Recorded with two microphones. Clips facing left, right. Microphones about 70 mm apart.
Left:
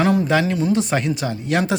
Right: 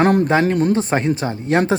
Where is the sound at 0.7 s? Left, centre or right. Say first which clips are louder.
Right 2 dB; right.